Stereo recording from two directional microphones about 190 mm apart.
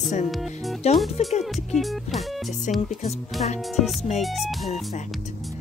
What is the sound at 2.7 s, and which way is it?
Speech, 40° left (ahead or behind).